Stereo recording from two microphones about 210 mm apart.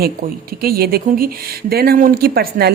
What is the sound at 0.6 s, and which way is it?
Speech, 45° right (ahead or behind).